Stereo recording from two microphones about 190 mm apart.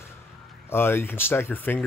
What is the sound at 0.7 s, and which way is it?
Speech, 10° left (ahead or behind).